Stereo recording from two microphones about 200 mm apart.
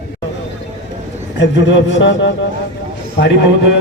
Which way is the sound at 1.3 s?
65° left (ahead or behind).